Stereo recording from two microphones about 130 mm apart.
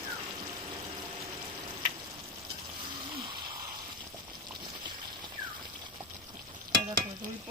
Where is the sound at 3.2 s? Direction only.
35° right (ahead or behind).